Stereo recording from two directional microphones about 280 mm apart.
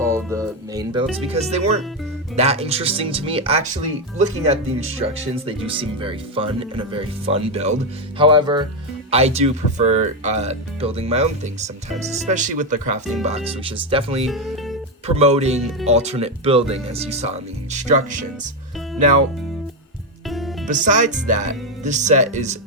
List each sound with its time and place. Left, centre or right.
0.0 s speech: centre
1.3 s speech: right
14.3 s speech: centre
15.0 s speech: right
20.7 s speech: right